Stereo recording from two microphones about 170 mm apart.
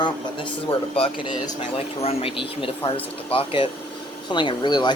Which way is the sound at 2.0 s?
35° left (ahead or behind).